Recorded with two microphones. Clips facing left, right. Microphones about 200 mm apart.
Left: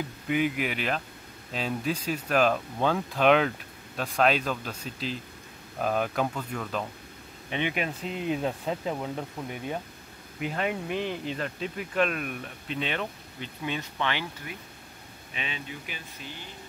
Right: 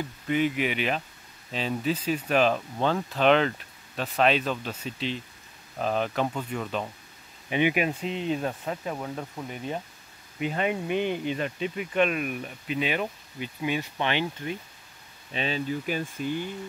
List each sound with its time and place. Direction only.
0.3 s speech: 5° left (ahead or behind)
8.0 s speech: 5° left (ahead or behind)
10.4 s speech: centre (ahead or behind); by 14.6 s 25° right (ahead or behind)
15.3 s speech: 35° right (ahead or behind)